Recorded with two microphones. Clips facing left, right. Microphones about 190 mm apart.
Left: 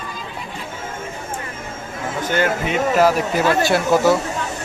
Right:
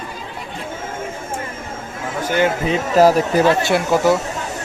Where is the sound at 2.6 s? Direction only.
35° right (ahead or behind).